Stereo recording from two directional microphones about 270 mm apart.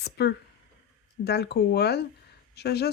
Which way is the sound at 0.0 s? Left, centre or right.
Left.